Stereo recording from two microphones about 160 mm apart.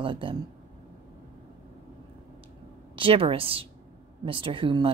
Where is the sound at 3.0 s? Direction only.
35° right (ahead or behind).